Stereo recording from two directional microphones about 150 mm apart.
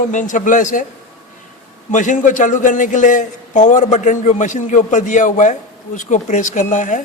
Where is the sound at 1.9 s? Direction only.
55° left (ahead or behind).